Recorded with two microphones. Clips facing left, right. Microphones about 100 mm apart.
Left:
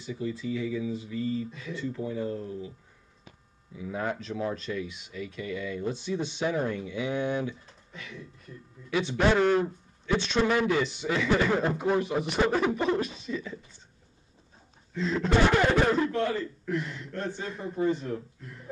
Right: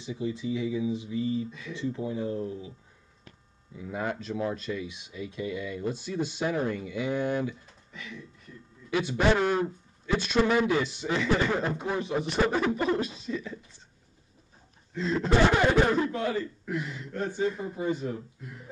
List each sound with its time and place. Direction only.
0.0 s speech: 20° right (ahead or behind)
3.9 s speech: centre (ahead or behind)
4.8 s a man's voice: 15° right (ahead or behind)
5.8 s speech: 5° right (ahead or behind)
9.1 s a man's voice: 10° right (ahead or behind)
15.0 s a man's voice: centre (ahead or behind)